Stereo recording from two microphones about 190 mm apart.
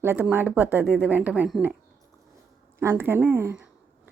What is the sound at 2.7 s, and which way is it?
Speech, 10° right (ahead or behind).